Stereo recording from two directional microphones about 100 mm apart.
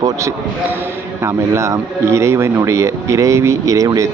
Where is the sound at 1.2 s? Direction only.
30° right (ahead or behind).